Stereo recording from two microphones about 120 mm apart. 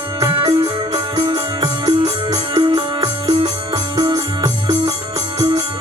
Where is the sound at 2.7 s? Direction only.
35° right (ahead or behind).